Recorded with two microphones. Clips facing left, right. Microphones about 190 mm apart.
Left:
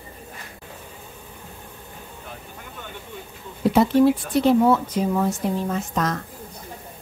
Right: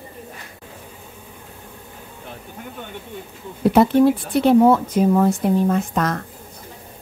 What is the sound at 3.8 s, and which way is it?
Speech, 60° right (ahead or behind).